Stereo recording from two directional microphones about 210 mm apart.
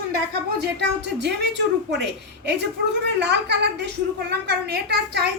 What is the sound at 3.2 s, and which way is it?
A woman's voice, 55° right (ahead or behind).